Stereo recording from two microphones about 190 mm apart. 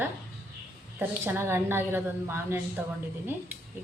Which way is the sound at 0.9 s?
10° right (ahead or behind).